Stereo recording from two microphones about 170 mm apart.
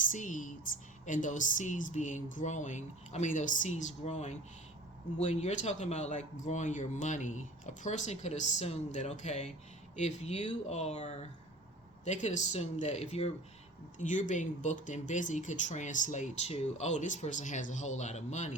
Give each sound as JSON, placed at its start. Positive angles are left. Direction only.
{"t": 0.1, "sound": "speech", "side_deg": 50}